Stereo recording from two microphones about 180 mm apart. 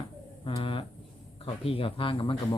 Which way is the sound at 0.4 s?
30° left (ahead or behind).